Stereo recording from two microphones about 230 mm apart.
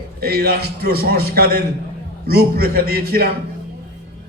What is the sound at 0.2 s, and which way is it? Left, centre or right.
A man's voice, right.